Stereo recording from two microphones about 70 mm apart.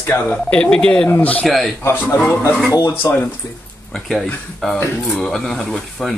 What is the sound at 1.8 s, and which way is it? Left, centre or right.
Speech, left.